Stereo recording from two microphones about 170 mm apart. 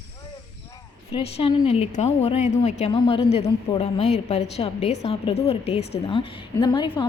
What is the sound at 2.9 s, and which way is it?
A woman's voice, 30° left (ahead or behind).